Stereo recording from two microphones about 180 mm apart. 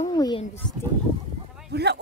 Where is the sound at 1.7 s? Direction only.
70° right (ahead or behind).